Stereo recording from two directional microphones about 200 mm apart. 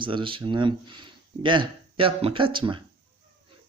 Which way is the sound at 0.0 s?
25° right (ahead or behind).